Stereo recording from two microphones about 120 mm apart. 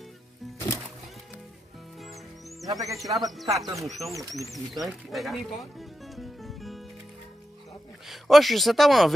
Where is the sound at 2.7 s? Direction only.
30° right (ahead or behind).